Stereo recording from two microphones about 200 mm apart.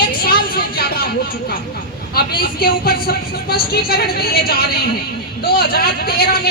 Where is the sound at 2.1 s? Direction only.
50° left (ahead or behind).